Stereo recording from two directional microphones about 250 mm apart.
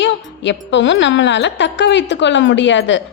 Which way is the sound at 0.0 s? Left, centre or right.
Left.